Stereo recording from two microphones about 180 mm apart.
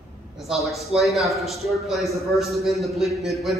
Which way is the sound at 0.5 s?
Centre (ahead or behind).